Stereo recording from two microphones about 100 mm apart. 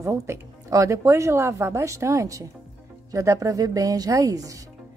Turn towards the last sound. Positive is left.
turn(degrees=-35)  # may be behind; listen again after turning